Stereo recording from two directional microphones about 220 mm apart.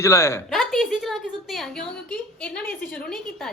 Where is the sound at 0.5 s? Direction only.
Centre (ahead or behind).